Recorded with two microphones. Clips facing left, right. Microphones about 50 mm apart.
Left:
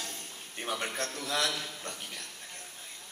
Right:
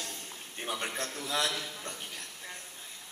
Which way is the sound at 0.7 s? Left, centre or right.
Centre.